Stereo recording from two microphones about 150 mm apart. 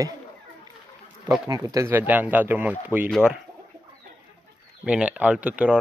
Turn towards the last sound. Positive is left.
turn(degrees=-10)  # may be behind; listen again after turning